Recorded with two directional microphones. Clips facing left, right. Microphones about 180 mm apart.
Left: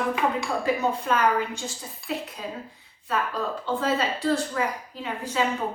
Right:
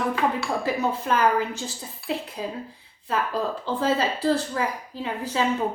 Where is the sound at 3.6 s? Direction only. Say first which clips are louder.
Right 1 dB; 30° right (ahead or behind).